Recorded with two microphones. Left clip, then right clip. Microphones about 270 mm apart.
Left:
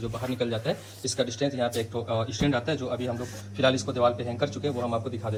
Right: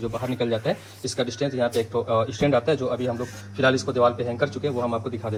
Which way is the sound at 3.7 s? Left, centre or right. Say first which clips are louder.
Right 4 dB; centre.